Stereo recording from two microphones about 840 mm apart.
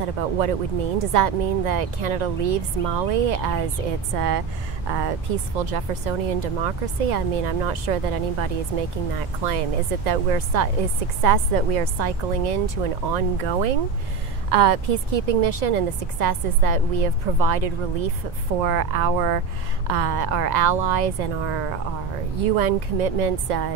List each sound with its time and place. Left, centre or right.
0.9 s speech: right
4.9 s speech: right